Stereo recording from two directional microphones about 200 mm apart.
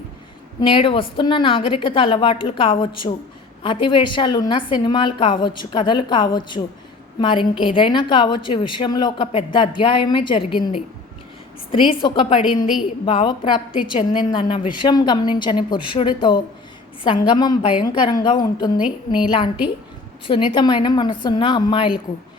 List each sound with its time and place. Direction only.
0.6 s a woman's voice: 25° left (ahead or behind)
12.4 s a woman's voice: 5° right (ahead or behind)
13.1 s a woman's voice: 25° left (ahead or behind)
18.8 s a woman's voice: 5° right (ahead or behind)
20.2 s a woman's voice: 25° left (ahead or behind)